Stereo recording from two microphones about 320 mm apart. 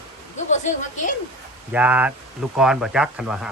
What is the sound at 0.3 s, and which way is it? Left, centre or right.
Speech, left.